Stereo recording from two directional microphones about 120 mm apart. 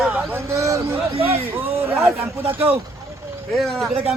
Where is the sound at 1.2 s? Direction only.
55° right (ahead or behind).